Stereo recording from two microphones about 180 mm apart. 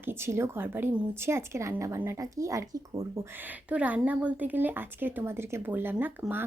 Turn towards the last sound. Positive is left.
turn(degrees=-10)  # may be behind; listen again after turning